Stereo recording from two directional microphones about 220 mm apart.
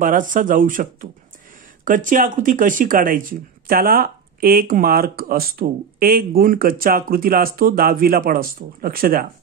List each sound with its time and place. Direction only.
0.0 s speech: 35° right (ahead or behind)
1.9 s speech: 35° right (ahead or behind)